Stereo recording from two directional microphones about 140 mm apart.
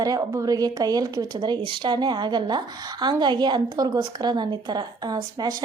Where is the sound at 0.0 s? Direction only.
25° right (ahead or behind).